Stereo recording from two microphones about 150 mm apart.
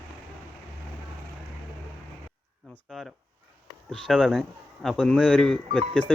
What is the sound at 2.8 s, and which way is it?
Speech, centre (ahead or behind).